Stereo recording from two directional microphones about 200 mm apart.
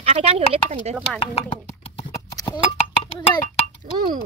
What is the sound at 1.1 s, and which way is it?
Clip-clop, 25° left (ahead or behind).